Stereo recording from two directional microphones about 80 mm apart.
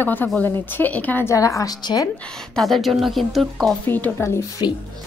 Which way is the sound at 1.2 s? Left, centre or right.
Left.